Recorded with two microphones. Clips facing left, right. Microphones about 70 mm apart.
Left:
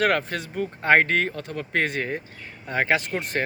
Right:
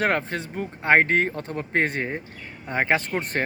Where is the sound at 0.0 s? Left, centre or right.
Right.